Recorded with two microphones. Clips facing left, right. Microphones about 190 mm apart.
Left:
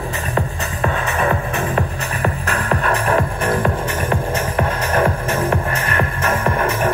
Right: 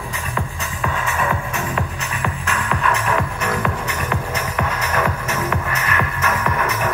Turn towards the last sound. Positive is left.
turn(degrees=30)  # may be behind; listen again after turning